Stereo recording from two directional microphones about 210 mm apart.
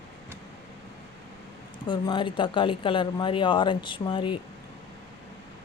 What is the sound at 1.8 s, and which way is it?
Speech, 20° left (ahead or behind).